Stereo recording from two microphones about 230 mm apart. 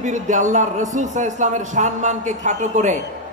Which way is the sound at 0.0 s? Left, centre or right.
Right.